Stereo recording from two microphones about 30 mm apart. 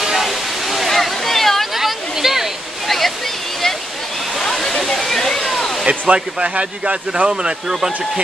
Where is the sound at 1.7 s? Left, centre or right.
Centre.